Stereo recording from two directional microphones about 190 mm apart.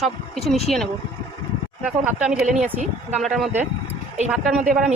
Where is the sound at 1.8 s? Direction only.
5° right (ahead or behind).